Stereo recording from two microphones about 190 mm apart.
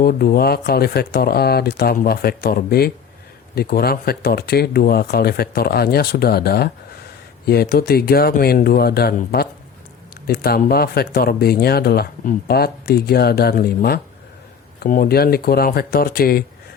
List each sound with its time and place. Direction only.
0.0 s speech: 50° left (ahead or behind)